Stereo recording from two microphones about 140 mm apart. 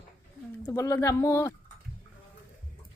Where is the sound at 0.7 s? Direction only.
20° left (ahead or behind).